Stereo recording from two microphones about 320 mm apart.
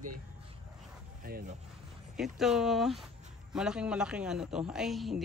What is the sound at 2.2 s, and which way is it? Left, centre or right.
Speech, centre.